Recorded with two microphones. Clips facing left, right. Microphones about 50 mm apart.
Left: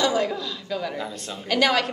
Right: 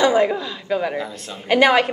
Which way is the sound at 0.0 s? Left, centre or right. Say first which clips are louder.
Right 6 dB; right.